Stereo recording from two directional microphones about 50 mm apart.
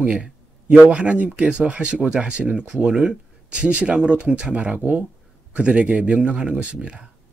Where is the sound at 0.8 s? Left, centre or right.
Right.